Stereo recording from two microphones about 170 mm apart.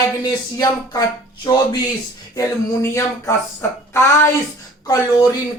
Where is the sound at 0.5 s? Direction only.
20° left (ahead or behind).